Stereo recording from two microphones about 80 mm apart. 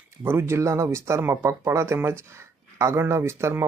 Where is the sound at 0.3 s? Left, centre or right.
Right.